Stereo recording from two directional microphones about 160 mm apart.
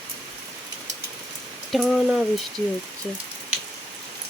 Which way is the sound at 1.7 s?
Centre (ahead or behind).